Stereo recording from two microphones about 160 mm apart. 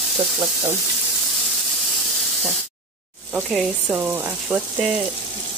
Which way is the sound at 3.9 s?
10° right (ahead or behind).